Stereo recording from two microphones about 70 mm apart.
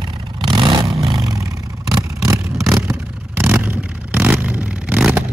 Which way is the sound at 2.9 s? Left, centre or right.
Right.